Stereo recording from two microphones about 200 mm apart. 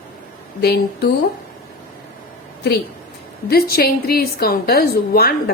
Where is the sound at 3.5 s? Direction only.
50° left (ahead or behind).